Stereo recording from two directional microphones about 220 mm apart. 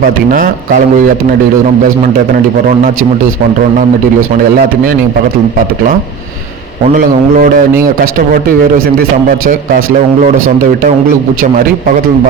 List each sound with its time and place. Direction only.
0.3 s a man's voice: 40° right (ahead or behind)
6.9 s a man's voice: 40° right (ahead or behind)